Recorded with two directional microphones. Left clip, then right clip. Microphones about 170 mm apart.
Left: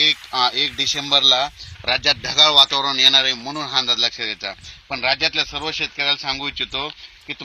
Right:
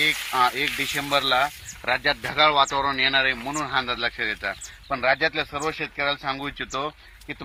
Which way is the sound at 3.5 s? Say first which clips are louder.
Left 5 dB; 30° left (ahead or behind).